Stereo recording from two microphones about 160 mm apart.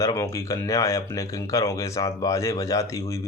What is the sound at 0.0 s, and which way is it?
Speech, 20° left (ahead or behind).